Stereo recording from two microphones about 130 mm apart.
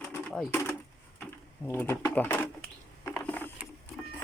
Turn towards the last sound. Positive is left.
turn(degrees=15)  # may be behind; listen again after turning